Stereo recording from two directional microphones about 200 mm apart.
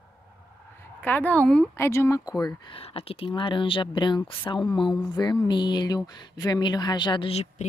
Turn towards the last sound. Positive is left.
turn(degrees=30)  # may be behind; listen again after turning